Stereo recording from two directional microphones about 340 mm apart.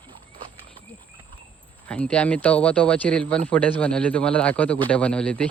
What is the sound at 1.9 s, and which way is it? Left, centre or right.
Speech, centre.